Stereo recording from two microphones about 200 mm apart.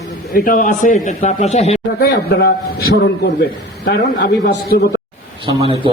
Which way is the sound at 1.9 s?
55° left (ahead or behind).